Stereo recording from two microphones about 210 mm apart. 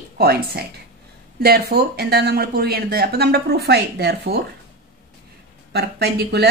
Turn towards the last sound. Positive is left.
turn(degrees=-50)  # may be behind; listen again after turning